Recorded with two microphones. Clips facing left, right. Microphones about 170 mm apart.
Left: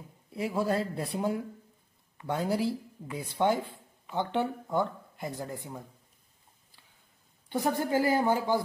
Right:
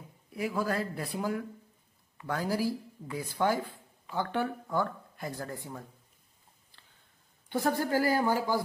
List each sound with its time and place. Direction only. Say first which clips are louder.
0.3 s speech: left 2 dB; 25° left (ahead or behind)
7.5 s speech: left 1 dB; 20° left (ahead or behind)